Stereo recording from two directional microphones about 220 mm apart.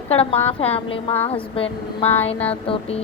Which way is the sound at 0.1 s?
25° left (ahead or behind).